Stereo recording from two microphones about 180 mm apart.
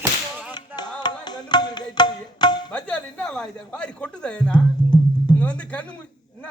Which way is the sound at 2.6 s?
5° left (ahead or behind).